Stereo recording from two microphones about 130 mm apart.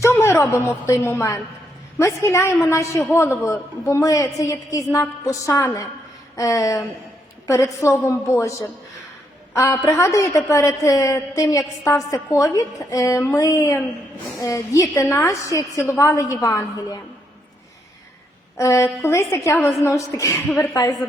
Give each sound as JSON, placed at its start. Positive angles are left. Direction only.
{"t": 0.0, "sound": "a woman's voice", "side_deg": 20}
{"t": 18.5, "sound": "a woman's voice", "side_deg": 25}
{"t": 20.5, "sound": "a woman's voice", "side_deg": 5}